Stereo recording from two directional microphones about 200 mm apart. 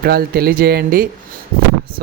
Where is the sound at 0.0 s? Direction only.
50° right (ahead or behind).